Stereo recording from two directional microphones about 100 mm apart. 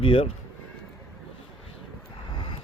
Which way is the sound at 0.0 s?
65° left (ahead or behind).